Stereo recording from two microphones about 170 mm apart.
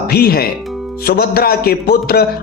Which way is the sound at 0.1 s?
65° left (ahead or behind).